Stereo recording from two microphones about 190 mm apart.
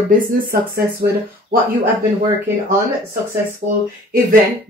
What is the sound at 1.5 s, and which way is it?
Speech, 50° right (ahead or behind).